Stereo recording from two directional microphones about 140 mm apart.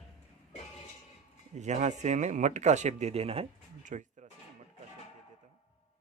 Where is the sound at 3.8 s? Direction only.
60° right (ahead or behind).